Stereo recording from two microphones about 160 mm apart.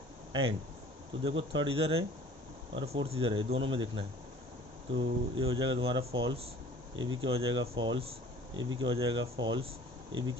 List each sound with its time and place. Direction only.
1.2 s speech: 35° right (ahead or behind)